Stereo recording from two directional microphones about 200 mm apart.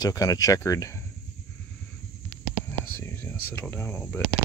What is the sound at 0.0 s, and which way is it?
Speech, 20° left (ahead or behind).